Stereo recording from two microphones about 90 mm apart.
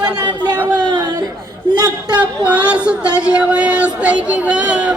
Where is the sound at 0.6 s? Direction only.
20° right (ahead or behind).